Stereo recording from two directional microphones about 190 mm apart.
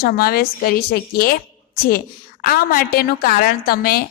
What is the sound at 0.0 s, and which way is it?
A woman's voice, 55° left (ahead or behind).